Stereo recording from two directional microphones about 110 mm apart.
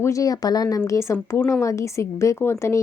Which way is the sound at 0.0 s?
30° left (ahead or behind).